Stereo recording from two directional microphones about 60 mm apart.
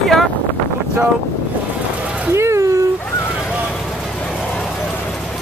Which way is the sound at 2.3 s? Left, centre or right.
Right.